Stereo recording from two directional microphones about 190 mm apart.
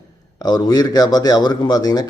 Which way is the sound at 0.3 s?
20° left (ahead or behind).